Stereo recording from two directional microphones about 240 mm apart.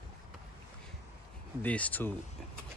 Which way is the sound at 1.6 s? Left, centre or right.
Centre.